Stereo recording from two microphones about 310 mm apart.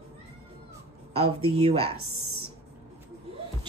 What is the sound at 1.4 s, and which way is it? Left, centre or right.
Speech, centre.